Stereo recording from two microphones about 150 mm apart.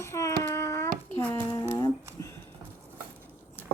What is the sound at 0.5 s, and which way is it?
Child singing, 20° left (ahead or behind).